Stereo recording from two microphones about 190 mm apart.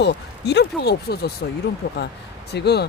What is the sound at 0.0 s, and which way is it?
Speech, 65° left (ahead or behind).